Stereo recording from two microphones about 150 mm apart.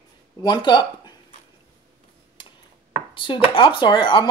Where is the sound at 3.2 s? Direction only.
35° left (ahead or behind).